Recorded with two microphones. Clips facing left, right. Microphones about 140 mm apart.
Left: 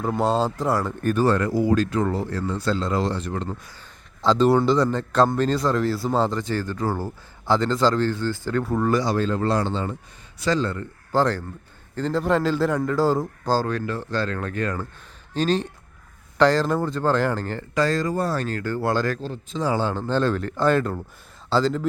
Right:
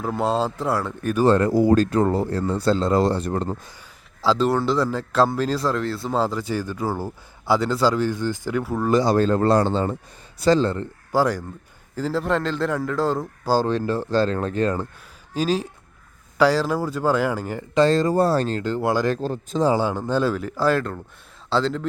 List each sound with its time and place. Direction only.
0.0 s speech: centre (ahead or behind)
1.2 s speech: 30° right (ahead or behind)
4.2 s speech: centre (ahead or behind)
9.0 s speech: 45° right (ahead or behind)
11.1 s speech: 10° right (ahead or behind)
13.7 s speech: 30° right (ahead or behind)
15.3 s speech: 5° right (ahead or behind)
17.7 s speech: 25° right (ahead or behind)
19.2 s speech: 45° right (ahead or behind)
19.7 s speech: 15° right (ahead or behind)